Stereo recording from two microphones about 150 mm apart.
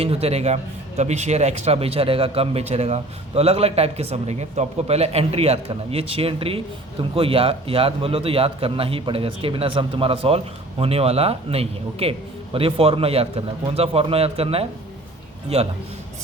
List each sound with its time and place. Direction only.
0.0 s a man's voice: 40° right (ahead or behind)